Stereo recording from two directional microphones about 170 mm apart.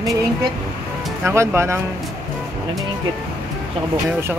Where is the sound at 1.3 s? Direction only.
15° right (ahead or behind).